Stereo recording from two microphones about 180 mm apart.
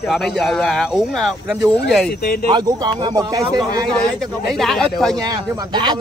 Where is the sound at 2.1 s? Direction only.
60° left (ahead or behind).